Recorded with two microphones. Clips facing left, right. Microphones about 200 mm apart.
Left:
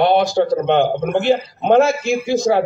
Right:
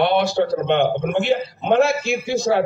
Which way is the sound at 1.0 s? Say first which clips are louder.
Left 2 dB; 60° left (ahead or behind).